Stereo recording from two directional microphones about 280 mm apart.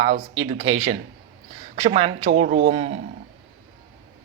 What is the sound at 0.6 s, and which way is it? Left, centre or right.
Speech, right.